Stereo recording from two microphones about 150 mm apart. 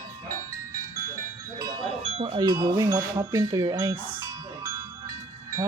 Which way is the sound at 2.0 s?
40° right (ahead or behind).